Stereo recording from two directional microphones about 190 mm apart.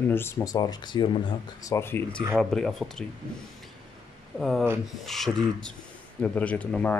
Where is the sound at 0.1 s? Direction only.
15° left (ahead or behind).